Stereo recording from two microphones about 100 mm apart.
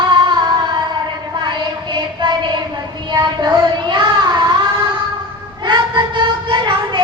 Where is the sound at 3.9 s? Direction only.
50° right (ahead or behind).